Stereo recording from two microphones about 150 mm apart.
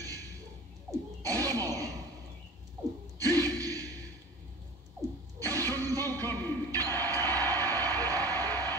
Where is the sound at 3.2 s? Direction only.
25° right (ahead or behind).